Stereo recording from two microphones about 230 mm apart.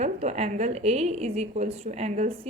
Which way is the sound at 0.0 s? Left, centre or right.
Right.